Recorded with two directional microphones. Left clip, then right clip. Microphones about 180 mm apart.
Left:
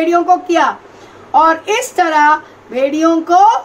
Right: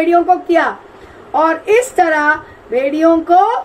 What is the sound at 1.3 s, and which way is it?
A woman's voice, 35° left (ahead or behind).